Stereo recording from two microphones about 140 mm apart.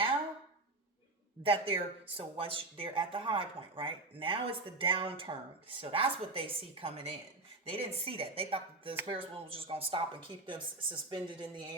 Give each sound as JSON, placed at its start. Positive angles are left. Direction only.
{"t": 1.5, "sound": "speech", "side_deg": -40}